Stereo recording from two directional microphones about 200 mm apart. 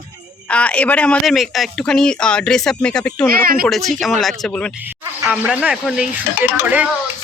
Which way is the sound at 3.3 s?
45° right (ahead or behind).